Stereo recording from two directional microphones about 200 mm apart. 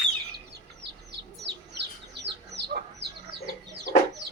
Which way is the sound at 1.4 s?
55° right (ahead or behind).